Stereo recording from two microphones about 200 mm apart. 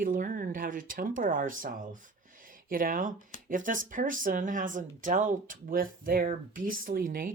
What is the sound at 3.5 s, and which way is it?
Speech, 40° right (ahead or behind).